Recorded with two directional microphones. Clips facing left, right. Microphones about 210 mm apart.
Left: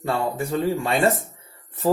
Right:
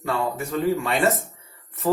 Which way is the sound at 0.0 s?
30° left (ahead or behind).